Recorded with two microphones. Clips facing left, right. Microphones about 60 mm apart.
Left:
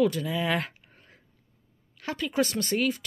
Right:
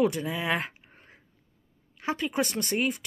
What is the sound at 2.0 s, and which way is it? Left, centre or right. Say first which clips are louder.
Speech: left 1 dB; right.